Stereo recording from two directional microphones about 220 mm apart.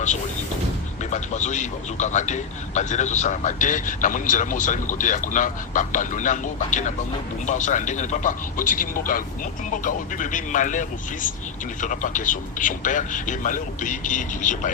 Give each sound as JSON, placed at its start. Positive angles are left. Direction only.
{"t": 1.1, "sound": "speech", "side_deg": 30}